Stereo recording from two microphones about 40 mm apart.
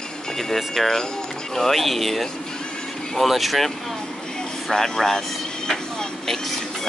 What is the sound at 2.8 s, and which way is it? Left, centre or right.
Vehicle, centre.